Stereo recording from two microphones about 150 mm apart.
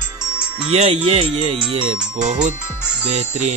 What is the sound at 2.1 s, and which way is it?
Speech, 50° right (ahead or behind).